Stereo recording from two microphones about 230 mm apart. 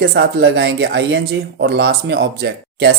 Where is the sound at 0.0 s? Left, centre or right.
Right.